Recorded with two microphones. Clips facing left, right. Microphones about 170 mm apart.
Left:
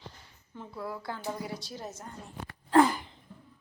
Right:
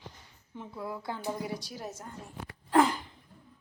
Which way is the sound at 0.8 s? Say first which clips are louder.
Even; 20° right (ahead or behind).